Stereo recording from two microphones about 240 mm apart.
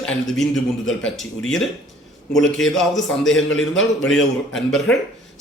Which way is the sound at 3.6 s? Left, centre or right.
Left.